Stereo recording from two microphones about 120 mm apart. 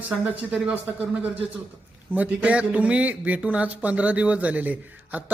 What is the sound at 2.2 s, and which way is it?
Speech, 10° right (ahead or behind).